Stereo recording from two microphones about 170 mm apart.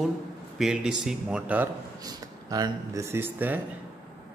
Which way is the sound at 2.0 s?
20° right (ahead or behind).